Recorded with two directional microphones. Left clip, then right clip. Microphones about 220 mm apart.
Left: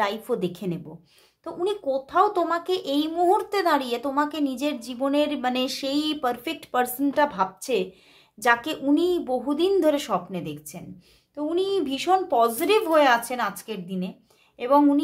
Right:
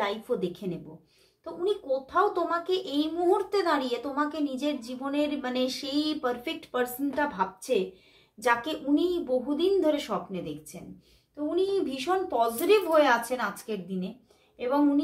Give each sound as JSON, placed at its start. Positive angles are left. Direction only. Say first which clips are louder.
{"t": 0.0, "sound": "a child's voice", "louder": "left 4 dB", "side_deg": 35}